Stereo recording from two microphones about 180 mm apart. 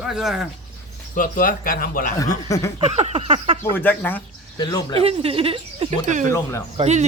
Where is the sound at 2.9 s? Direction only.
35° right (ahead or behind).